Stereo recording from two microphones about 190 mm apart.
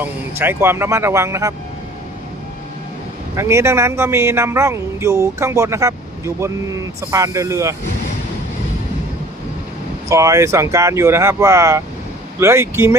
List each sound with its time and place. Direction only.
0.0 s a man's voice: 10° right (ahead or behind)
3.3 s a man's voice: 15° right (ahead or behind)
10.1 s a man's voice: 15° right (ahead or behind)